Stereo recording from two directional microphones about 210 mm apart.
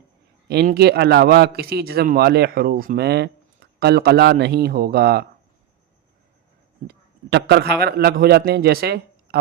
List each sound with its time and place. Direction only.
0.4 s a man's voice: 50° right (ahead or behind)
6.8 s a man's voice: 55° right (ahead or behind)